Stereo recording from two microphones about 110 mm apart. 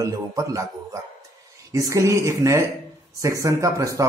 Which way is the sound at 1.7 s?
30° right (ahead or behind).